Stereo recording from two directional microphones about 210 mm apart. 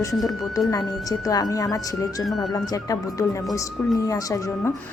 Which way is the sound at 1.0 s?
15° left (ahead or behind).